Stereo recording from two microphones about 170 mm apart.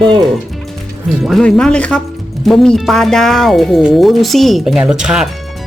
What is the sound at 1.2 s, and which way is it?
Speech, centre (ahead or behind).